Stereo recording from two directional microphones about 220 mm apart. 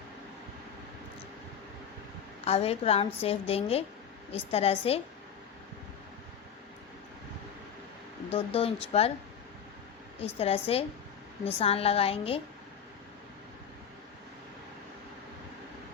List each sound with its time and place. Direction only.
2.4 s a woman's voice: 25° left (ahead or behind)
8.3 s a woman's voice: 25° left (ahead or behind)
10.3 s a woman's voice: 25° left (ahead or behind)